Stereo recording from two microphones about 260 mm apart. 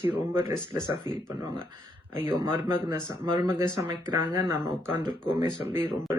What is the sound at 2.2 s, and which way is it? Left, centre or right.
Speech, centre.